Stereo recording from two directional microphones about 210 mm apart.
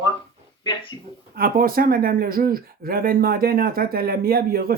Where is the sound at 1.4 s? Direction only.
45° right (ahead or behind).